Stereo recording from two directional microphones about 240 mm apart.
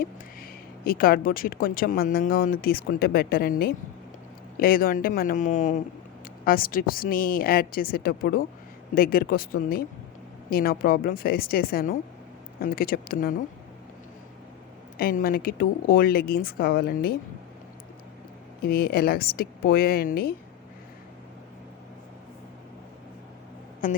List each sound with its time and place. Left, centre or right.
0.0 s speech: left
14.9 s speech: left
18.6 s speech: left
23.8 s speech: left